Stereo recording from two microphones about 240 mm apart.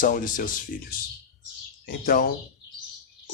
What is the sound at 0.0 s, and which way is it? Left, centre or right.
Speech, left.